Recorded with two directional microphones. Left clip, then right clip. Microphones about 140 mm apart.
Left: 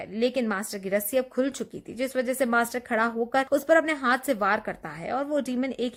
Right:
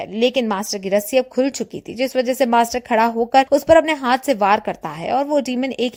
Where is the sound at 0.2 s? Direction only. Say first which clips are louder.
Right 8 dB; 40° right (ahead or behind).